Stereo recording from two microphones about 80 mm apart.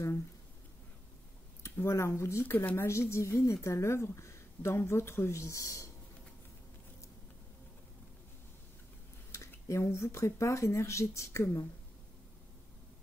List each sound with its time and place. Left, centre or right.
1.6 s speech: left
9.3 s speech: left